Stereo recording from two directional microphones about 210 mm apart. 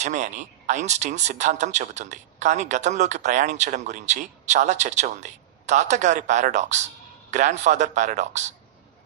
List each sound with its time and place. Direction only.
0.0 s speech: 35° right (ahead or behind)